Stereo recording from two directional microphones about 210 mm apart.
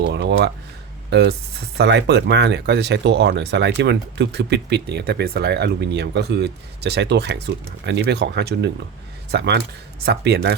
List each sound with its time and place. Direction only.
0.0 s speech: 50° right (ahead or behind)